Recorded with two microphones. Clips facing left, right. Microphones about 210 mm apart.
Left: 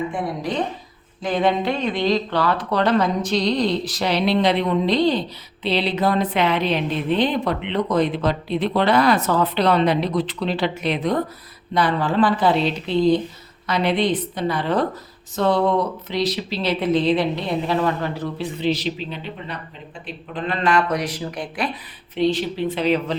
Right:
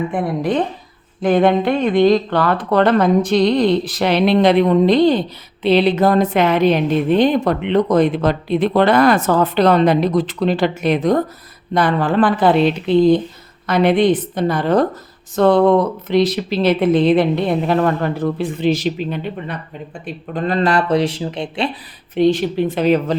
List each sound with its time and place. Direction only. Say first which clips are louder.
0.1 s a woman's voice: right 6 dB; 55° right (ahead or behind)
20.1 s speech: right 6 dB; 40° right (ahead or behind); by 21.7 s 25° right (ahead or behind)
22.1 s a woman's voice: right 6 dB; 50° right (ahead or behind)